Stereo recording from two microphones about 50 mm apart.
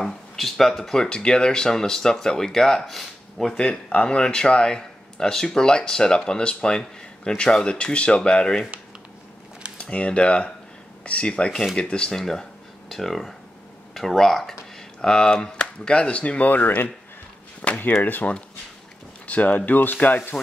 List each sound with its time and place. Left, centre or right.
0.0 s speech: centre
3.0 s speech: centre
3.5 s speech: centre
9.8 s speech: left
17.6 s speech: left
18.0 s speech: left